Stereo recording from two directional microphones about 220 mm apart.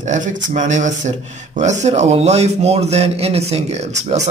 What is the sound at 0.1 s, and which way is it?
Speech, 35° right (ahead or behind).